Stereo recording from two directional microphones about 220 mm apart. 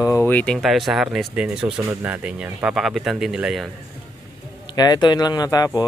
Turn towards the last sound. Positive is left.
turn(degrees=15)  # may be behind; listen again after turning